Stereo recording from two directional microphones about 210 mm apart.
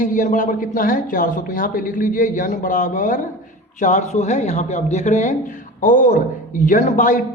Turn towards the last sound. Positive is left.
turn(degrees=40)  # may be behind; listen again after turning